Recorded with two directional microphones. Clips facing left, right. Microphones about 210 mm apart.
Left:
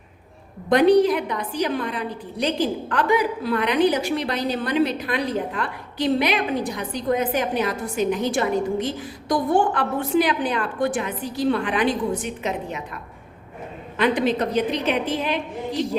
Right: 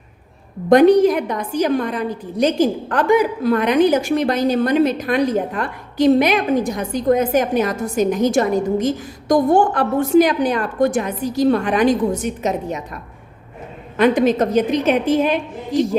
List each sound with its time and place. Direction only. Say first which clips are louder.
0.7 s a woman's voice: right 5 dB; 45° right (ahead or behind)